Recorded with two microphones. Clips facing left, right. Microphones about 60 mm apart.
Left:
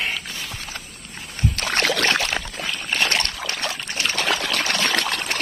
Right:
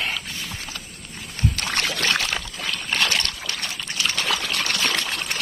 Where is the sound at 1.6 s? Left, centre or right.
Left.